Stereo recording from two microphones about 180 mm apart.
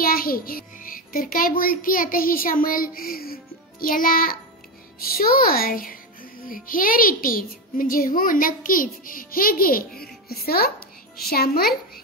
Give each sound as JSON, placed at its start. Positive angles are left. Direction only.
{"t": 0.0, "sound": "a child's voice", "side_deg": 55}